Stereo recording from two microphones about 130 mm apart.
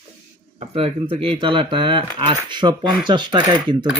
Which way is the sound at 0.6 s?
50° right (ahead or behind).